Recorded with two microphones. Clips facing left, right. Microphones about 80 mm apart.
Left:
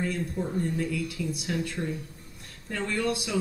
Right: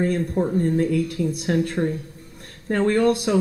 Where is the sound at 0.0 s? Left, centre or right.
Right.